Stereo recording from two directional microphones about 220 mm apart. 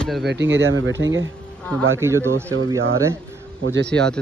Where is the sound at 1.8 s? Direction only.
10° right (ahead or behind).